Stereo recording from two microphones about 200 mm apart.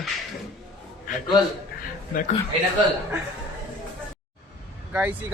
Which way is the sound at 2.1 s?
40° left (ahead or behind).